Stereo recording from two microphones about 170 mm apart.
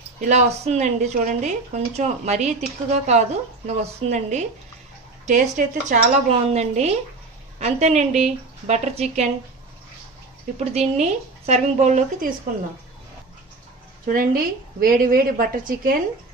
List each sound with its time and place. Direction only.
0.2 s speech: 45° right (ahead or behind)
10.6 s speech: 40° right (ahead or behind)
14.0 s a woman's voice: 55° right (ahead or behind)